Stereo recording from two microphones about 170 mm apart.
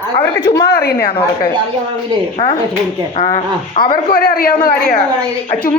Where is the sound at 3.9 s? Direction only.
60° left (ahead or behind).